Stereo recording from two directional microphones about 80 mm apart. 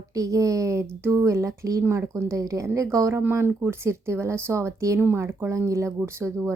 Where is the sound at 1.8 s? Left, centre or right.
Right.